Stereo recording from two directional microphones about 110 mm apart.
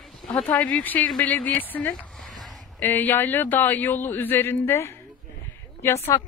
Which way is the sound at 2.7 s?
15° left (ahead or behind).